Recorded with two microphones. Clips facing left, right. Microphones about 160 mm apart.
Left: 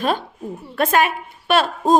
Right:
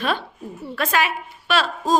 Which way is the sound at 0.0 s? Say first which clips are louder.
Left 3 dB; 45° left (ahead or behind).